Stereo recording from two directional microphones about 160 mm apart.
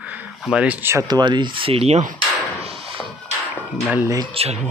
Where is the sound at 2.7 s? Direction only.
40° right (ahead or behind).